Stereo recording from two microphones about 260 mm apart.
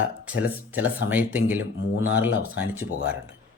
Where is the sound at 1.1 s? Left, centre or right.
Centre.